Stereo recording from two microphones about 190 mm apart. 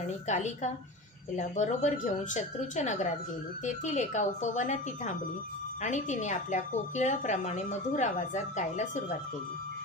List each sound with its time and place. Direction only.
0.3 s a woman's voice: 40° left (ahead or behind)